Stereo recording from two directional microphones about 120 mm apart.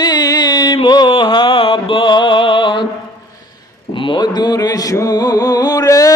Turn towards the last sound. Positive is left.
turn(degrees=30)  # may be behind; listen again after turning